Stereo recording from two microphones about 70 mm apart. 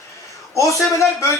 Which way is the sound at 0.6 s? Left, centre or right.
Left.